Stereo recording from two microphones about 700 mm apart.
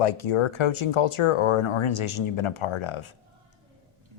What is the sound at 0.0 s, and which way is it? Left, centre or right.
Speech, left.